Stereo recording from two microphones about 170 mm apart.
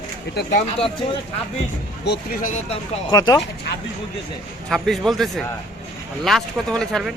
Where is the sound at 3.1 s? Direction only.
20° left (ahead or behind).